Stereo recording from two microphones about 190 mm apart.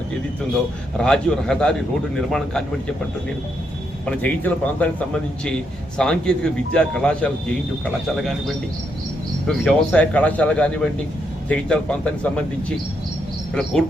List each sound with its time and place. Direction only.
0.9 s speech: 5° left (ahead or behind)
4.0 s speech: 5° left (ahead or behind)